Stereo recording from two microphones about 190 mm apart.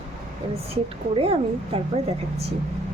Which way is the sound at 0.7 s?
30° right (ahead or behind).